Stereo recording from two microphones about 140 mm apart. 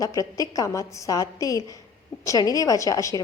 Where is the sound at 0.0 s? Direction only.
25° left (ahead or behind).